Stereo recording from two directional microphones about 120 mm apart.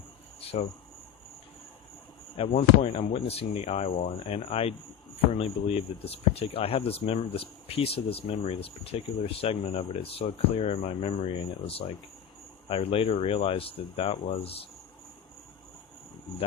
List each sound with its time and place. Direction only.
0.3 s cricket: 55° left (ahead or behind)
2.3 s speech: 55° left (ahead or behind)